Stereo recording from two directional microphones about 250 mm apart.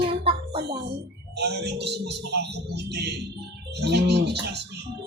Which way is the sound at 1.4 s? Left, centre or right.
Right.